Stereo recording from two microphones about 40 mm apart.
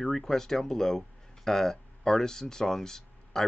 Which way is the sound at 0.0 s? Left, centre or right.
Centre.